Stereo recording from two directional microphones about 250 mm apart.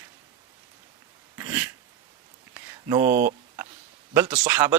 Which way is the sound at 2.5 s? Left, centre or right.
Centre.